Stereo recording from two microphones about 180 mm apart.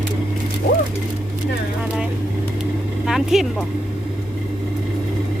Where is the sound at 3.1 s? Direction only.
Centre (ahead or behind).